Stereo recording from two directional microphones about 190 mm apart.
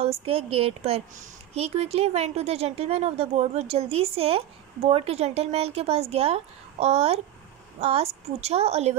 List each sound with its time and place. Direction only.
0.0 s speech: 30° right (ahead or behind)